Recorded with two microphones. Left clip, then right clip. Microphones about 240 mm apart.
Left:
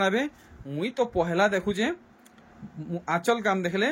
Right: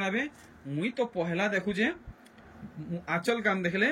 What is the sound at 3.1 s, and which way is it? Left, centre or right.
Speech, centre.